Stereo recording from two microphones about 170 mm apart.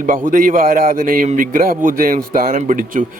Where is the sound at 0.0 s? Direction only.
50° right (ahead or behind).